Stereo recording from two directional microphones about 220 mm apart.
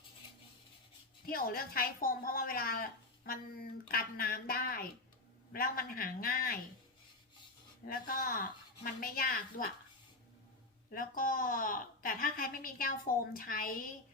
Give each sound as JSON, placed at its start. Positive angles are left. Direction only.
{"t": 1.2, "sound": "a woman's voice", "side_deg": 40}
{"t": 7.9, "sound": "a woman's voice", "side_deg": 40}
{"t": 10.9, "sound": "a woman's voice", "side_deg": 40}